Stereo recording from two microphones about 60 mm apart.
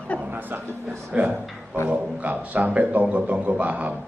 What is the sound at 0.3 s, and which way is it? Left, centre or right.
Speech, right.